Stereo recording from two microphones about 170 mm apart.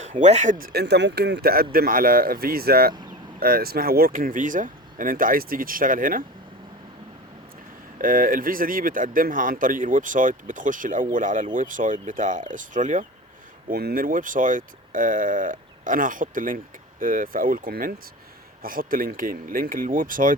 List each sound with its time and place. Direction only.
0.0 s speech: 45° right (ahead or behind)
0.7 s speech: 75° right (ahead or behind); by 6.2 s 55° right (ahead or behind)
7.9 s speech: 55° right (ahead or behind)
13.7 s speech: 60° right (ahead or behind)